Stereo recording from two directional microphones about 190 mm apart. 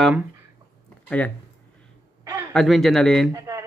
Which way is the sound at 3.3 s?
15° right (ahead or behind).